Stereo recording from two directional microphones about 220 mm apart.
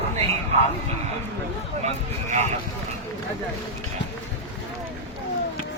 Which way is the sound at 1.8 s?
30° right (ahead or behind).